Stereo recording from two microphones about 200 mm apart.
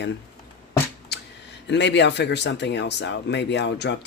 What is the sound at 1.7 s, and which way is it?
Speech, 60° left (ahead or behind).